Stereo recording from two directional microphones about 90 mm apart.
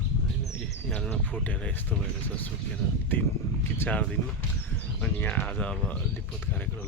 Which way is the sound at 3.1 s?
20° left (ahead or behind).